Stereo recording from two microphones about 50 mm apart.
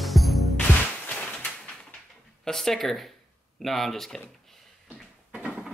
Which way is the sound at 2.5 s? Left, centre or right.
Centre.